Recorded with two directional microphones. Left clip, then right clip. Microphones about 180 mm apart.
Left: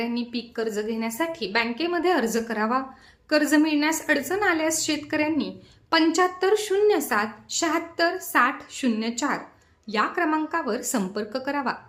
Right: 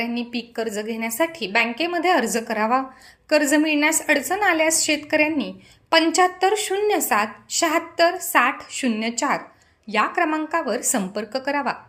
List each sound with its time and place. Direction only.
0.0 s a woman's voice: 15° right (ahead or behind)